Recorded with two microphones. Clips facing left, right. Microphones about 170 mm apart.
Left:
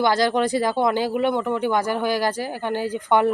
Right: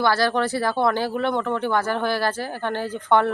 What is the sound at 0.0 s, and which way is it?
Speech, 15° left (ahead or behind).